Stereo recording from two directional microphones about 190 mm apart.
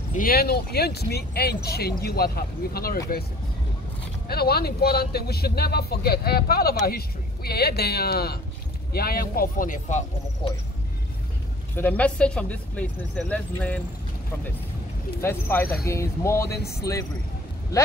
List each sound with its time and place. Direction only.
0.2 s speech: 55° left (ahead or behind)
4.3 s speech: 55° left (ahead or behind)
11.7 s speech: 10° left (ahead or behind)
15.1 s speech: 10° left (ahead or behind)